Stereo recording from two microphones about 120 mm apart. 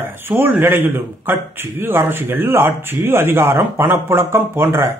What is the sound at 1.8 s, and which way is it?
Speech, 20° right (ahead or behind).